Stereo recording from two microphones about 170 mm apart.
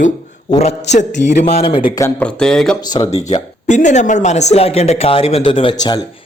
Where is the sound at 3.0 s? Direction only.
40° left (ahead or behind); by 6.0 s 25° left (ahead or behind).